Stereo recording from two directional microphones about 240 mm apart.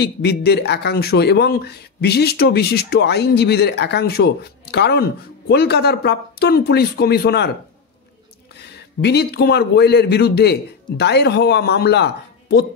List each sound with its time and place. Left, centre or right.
0.0 s speech: left
8.5 s a man's voice: left